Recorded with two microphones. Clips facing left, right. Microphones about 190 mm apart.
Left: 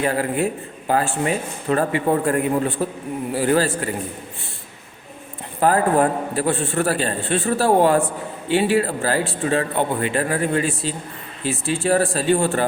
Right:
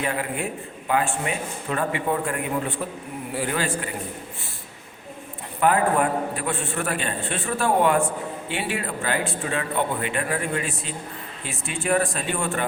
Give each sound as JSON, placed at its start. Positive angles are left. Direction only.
{"t": 0.0, "sound": "a man's voice", "side_deg": 40}
{"t": 5.5, "sound": "a man's voice", "side_deg": 35}